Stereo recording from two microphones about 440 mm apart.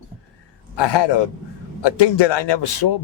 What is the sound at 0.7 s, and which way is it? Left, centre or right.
A man's voice, left.